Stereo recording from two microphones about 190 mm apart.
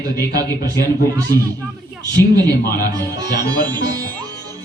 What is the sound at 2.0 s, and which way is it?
Speech, 20° right (ahead or behind).